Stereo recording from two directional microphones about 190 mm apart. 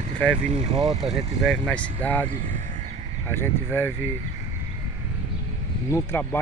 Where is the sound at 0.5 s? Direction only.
20° right (ahead or behind).